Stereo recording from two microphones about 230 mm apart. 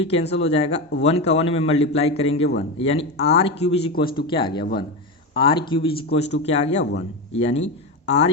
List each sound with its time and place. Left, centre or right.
0.0 s speech: left